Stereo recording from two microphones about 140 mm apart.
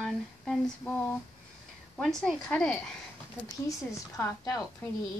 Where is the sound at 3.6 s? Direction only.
20° left (ahead or behind).